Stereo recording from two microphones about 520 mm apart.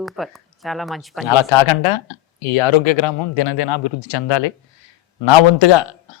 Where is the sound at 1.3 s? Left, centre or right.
Left.